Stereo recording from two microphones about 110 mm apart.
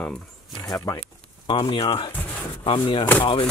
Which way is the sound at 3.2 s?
50° left (ahead or behind).